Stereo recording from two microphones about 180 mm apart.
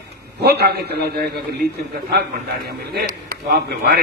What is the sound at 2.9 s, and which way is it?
A man's voice, 60° right (ahead or behind).